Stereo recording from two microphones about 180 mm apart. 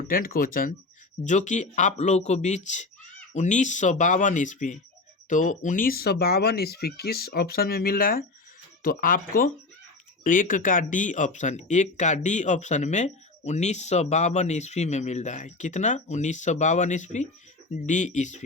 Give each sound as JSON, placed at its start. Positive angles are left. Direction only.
{"t": 0.1, "sound": "speech", "side_deg": 55}